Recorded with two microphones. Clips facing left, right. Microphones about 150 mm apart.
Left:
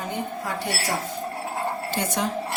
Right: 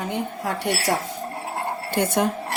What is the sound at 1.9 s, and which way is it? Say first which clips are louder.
Speech: right 7 dB; 55° right (ahead or behind).